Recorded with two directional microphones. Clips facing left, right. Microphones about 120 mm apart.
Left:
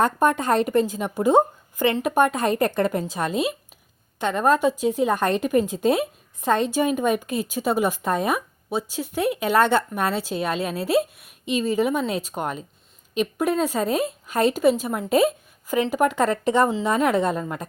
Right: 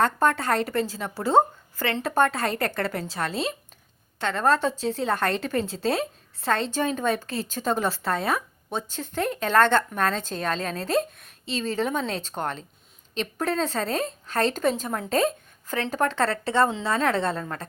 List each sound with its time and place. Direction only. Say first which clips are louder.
0.0 s a woman's voice: left 2 dB; 15° left (ahead or behind)